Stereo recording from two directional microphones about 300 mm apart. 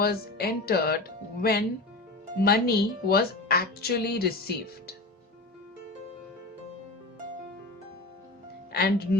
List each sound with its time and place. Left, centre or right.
0.0 s a woman's voice: left
8.7 s speech: left